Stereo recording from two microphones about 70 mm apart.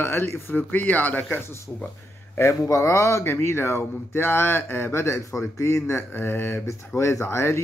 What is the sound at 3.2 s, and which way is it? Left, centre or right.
A man's voice, left.